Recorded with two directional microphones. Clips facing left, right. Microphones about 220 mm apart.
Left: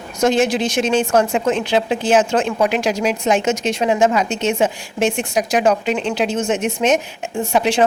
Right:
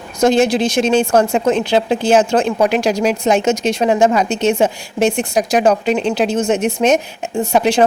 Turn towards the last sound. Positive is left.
turn(degrees=-40)  # may be behind; listen again after turning